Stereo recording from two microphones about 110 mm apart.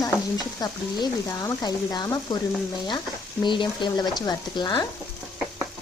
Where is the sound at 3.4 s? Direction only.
45° left (ahead or behind).